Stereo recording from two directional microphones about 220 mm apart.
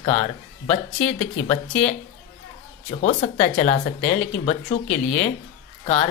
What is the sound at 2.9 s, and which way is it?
Speech, 30° left (ahead or behind).